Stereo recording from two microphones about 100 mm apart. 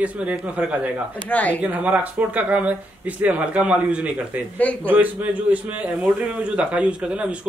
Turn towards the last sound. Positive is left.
turn(degrees=-10)  # may be behind; listen again after turning